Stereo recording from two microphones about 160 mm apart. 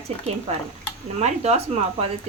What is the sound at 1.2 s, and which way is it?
Speech, 40° right (ahead or behind).